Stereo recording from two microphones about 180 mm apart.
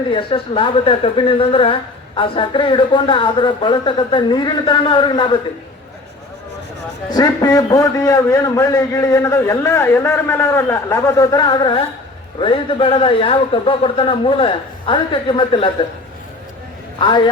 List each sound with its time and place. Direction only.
0.1 s a woman's voice: 30° left (ahead or behind)
7.1 s a man's voice: 20° left (ahead or behind)
17.0 s a woman's voice: 25° left (ahead or behind)